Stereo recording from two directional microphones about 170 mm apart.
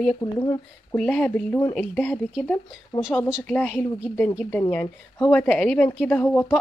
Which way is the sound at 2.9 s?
25° left (ahead or behind).